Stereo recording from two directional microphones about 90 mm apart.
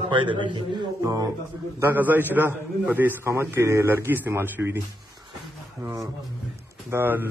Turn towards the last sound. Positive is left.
turn(degrees=-25)  # may be behind; listen again after turning